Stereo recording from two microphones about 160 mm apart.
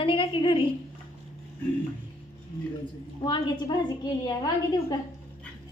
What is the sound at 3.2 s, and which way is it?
Speech, 30° left (ahead or behind).